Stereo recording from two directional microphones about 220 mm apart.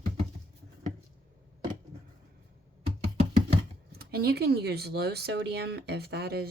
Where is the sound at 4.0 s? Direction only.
45° right (ahead or behind).